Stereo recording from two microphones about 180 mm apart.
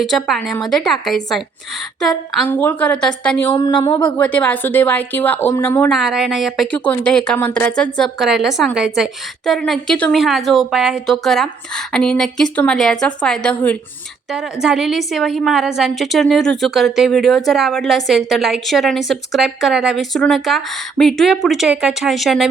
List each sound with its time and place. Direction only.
0.0 s a woman's voice: centre (ahead or behind)
3.5 s speech: 25° left (ahead or behind)
4.2 s speech: 5° left (ahead or behind)
5.9 s a woman's voice: centre (ahead or behind)
14.3 s a woman's voice: 5° right (ahead or behind)